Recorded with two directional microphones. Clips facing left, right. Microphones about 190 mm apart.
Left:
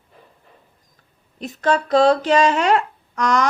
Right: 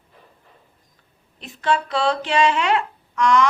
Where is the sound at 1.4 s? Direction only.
40° left (ahead or behind).